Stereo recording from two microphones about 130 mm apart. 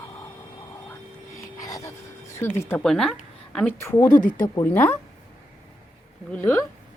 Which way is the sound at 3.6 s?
20° left (ahead or behind).